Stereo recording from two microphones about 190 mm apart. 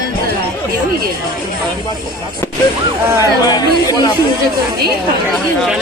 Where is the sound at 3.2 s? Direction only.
20° left (ahead or behind).